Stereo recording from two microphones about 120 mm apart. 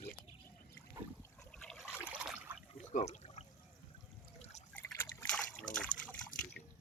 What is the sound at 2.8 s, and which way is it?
Water, 80° left.